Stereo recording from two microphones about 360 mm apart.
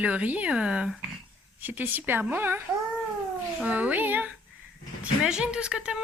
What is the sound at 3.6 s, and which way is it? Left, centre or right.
A woman's voice, centre.